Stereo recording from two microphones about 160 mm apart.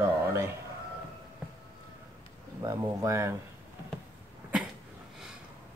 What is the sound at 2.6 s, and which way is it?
Speech, 20° right (ahead or behind).